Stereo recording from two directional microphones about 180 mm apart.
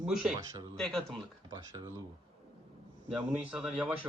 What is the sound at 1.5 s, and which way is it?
Speech, 20° right (ahead or behind).